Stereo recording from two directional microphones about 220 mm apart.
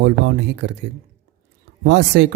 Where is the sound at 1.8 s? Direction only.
55° right (ahead or behind).